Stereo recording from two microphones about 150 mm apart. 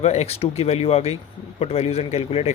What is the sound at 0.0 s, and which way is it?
Speech, 45° left (ahead or behind).